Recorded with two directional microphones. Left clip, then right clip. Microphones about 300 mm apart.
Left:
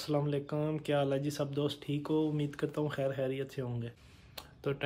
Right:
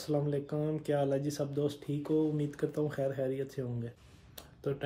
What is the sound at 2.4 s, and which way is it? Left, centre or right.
Speech, centre.